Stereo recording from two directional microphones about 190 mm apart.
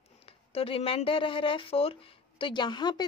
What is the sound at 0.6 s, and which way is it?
Speech, 30° left (ahead or behind).